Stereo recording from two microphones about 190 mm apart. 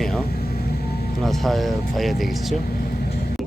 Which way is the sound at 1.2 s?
Centre (ahead or behind).